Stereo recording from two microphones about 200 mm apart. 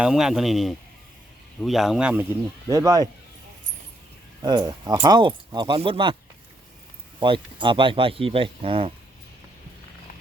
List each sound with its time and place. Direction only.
0.0 s speech: 5° right (ahead or behind)
2.6 s speech: 15° right (ahead or behind)
4.4 s speech: 20° right (ahead or behind)
7.2 s speech: 25° right (ahead or behind)